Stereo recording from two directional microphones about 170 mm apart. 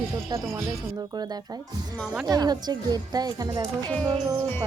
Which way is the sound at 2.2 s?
20° right (ahead or behind).